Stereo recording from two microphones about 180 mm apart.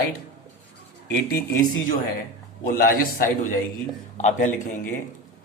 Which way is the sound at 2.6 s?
50° left (ahead or behind).